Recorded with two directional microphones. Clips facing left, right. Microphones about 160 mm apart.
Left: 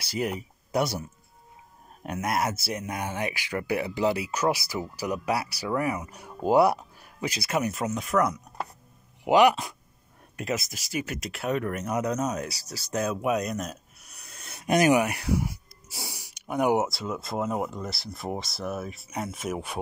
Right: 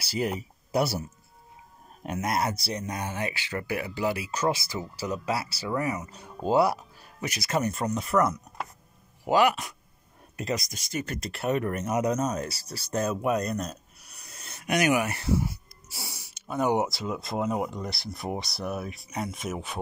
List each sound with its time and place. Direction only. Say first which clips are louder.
0.0 s speech: even; 5° right (ahead or behind)
2.1 s speech: even; 5° left (ahead or behind)
2.8 s speech: left 2 dB; 15° left (ahead or behind)
4.3 s speech: left 1 dB; 10° left (ahead or behind)
7.5 s speech: right 1 dB; 5° left (ahead or behind)
9.2 s speech: left 3 dB; 20° left (ahead or behind)
10.4 s speech: even; 5° left (ahead or behind)
15.0 s speech: left 1 dB; 15° left (ahead or behind)
16.8 s speech: even; centre (ahead or behind)